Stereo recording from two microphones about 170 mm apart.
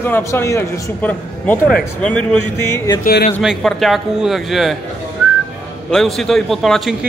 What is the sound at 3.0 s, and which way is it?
Speech, 65° left (ahead or behind).